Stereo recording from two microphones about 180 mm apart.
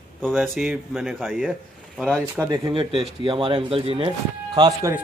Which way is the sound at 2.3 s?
20° right (ahead or behind).